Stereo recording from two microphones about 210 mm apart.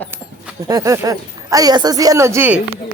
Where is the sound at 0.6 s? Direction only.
15° right (ahead or behind).